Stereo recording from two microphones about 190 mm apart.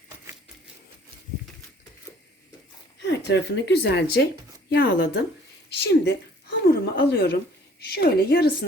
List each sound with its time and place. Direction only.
3.0 s speech: 65° left (ahead or behind)